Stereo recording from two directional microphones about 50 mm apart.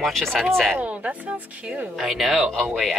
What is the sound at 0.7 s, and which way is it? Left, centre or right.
A woman's voice, right.